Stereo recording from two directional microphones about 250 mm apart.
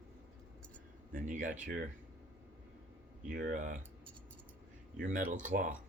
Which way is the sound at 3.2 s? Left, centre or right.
Right.